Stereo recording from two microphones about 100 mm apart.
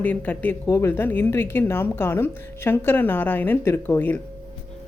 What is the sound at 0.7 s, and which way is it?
A woman's voice, 25° left (ahead or behind).